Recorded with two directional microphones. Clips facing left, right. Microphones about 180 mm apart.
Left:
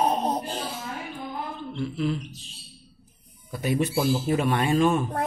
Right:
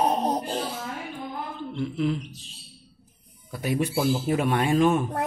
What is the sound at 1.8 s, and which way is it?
Speech, 15° right (ahead or behind).